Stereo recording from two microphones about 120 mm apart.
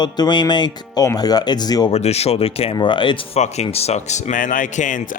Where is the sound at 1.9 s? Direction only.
60° left (ahead or behind).